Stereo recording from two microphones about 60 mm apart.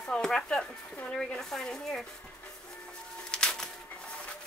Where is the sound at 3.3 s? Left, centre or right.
Centre.